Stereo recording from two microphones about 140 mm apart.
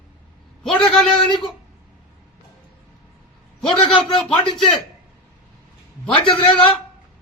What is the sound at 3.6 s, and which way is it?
Speech, 40° left (ahead or behind).